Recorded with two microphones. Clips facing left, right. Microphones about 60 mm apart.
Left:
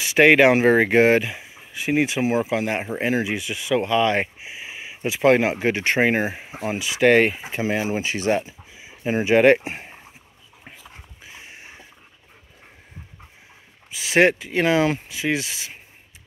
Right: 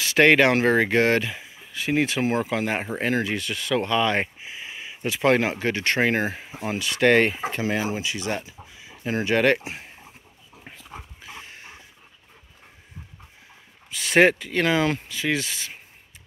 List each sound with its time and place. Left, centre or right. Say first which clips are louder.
0.0 s speech: left 3 dB; centre
7.9 s speech: left 6 dB; left
8.4 s speech: left 8 dB; centre
9.6 s speech: left 3 dB; left
10.6 s dog: right 3 dB; centre
13.9 s speech: even; centre